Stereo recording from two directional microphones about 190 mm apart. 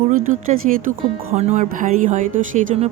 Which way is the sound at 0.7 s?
40° right (ahead or behind).